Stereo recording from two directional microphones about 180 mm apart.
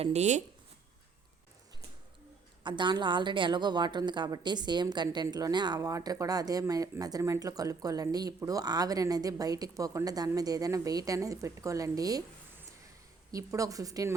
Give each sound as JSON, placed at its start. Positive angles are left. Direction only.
{"t": 0.0, "sound": "speech", "side_deg": -40}
{"t": 2.6, "sound": "a woman's voice", "side_deg": -25}
{"t": 13.3, "sound": "a woman's voice", "side_deg": -20}